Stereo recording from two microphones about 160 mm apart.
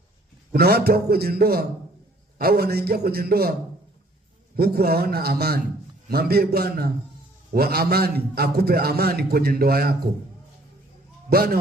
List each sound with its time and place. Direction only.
0.5 s a man's voice: 75° right (ahead or behind)
4.5 s a man's voice: 75° right (ahead or behind)
11.3 s a man's voice: 70° right (ahead or behind)